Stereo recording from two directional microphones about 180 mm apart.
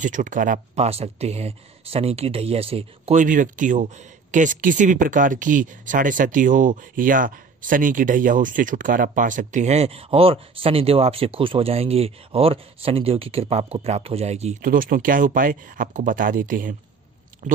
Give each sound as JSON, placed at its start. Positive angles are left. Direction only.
{"t": 0.0, "sound": "speech", "side_deg": -45}